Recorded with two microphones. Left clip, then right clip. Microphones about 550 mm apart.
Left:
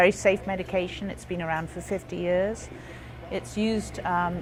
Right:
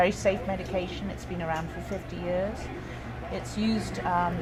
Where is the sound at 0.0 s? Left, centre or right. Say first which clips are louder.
Left 4 dB; left.